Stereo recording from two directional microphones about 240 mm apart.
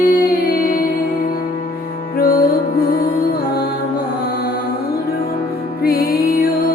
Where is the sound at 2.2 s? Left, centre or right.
Left.